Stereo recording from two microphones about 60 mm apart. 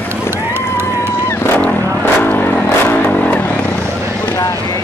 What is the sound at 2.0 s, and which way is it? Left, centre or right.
Vehicle, left.